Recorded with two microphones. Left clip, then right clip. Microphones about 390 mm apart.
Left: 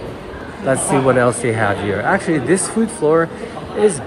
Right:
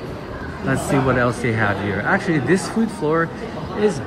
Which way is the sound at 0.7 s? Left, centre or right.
Centre.